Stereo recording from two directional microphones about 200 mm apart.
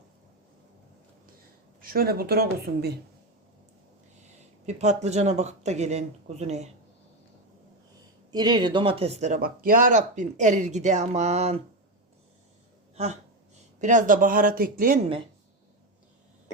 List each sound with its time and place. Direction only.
1.8 s speech: 45° right (ahead or behind)
4.6 s speech: 35° right (ahead or behind)
8.3 s speech: 20° right (ahead or behind)
13.7 s speech: 40° right (ahead or behind)